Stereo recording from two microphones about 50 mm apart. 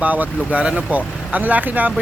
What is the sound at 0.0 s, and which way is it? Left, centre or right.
Speech, right.